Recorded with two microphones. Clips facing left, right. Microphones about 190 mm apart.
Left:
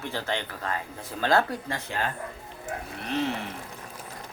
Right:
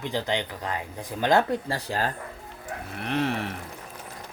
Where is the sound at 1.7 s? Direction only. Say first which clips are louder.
Right 3 dB; 35° right (ahead or behind).